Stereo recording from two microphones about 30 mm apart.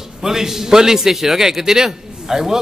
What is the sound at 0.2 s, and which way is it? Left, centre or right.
A man's voice, centre.